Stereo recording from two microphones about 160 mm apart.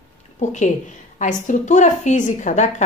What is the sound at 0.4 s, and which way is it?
A woman's voice, 50° left (ahead or behind).